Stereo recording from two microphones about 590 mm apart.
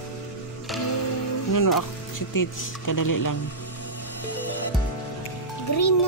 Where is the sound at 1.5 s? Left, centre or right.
Left.